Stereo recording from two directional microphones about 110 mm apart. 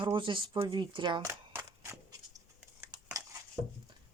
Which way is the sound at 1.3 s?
20° right (ahead or behind).